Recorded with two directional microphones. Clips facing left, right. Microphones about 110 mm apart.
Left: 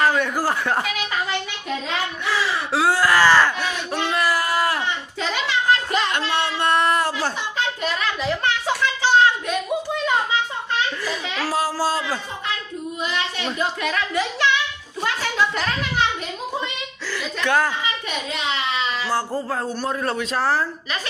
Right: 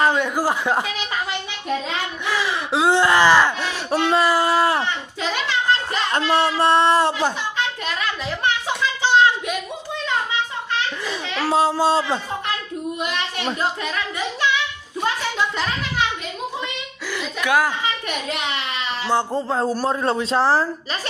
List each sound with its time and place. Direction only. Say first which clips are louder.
0.0 s a man's voice: right 1 dB; 20° right (ahead or behind)
2.2 s gasp: right 1 dB; 15° right (ahead or behind)
3.6 s a sound: right 3 dB; 30° right (ahead or behind)
6.1 s speech: right 4 dB; 35° right (ahead or behind)
8.7 s a sound: left 1 dB; 20° right (ahead or behind)
11.4 s speech: right 5 dB; 25° right (ahead or behind)
13.0 s a sound: left 3 dB; 60° right (ahead or behind)
17.4 s a man's voice: right 1 dB; 10° right (ahead or behind)
18.3 s a child's voice: left 1 dB; 60° right (ahead or behind)
19.0 s speech: right 3 dB; 25° right (ahead or behind)